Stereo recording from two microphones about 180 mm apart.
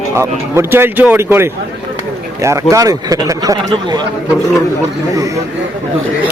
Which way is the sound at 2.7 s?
20° right (ahead or behind).